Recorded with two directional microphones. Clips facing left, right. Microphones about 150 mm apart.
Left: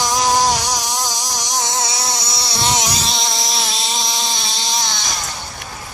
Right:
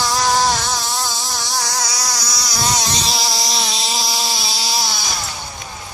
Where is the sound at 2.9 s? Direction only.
Centre (ahead or behind).